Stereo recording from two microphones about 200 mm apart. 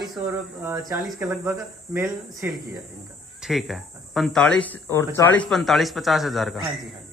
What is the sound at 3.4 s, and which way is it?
Speech, centre (ahead or behind).